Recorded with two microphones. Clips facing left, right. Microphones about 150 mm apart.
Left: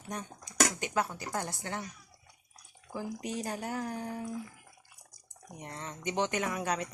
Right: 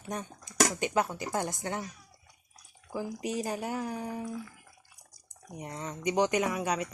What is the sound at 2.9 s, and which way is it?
Speech, 5° right (ahead or behind).